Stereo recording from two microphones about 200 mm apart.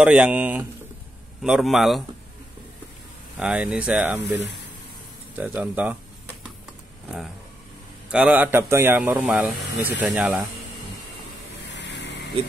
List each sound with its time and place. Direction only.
0.0 s speech: 5° right (ahead or behind)
3.3 s speech: 5° right (ahead or behind)
8.1 s speech: 5° right (ahead or behind)
11.7 s vehicle: 60° left (ahead or behind)